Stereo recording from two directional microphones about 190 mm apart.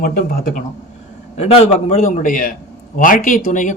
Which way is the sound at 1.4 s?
30° left (ahead or behind).